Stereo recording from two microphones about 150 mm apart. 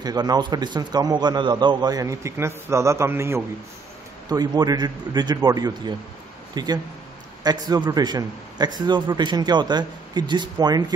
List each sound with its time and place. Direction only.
0.0 s a man's voice: 25° right (ahead or behind)